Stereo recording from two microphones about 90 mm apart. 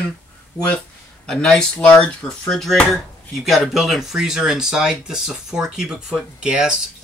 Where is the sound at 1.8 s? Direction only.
15° left (ahead or behind).